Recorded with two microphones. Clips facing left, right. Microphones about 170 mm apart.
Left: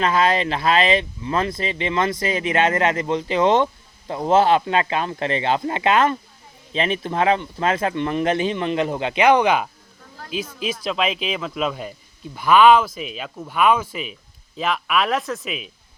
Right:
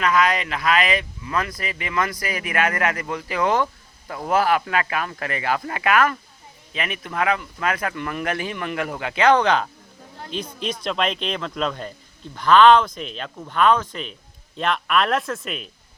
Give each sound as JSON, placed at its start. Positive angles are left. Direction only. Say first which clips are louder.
{"t": 0.0, "sound": "a man's voice", "louder": "left 2 dB", "side_deg": 30}